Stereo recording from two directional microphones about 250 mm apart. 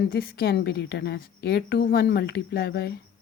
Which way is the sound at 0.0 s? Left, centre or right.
Left.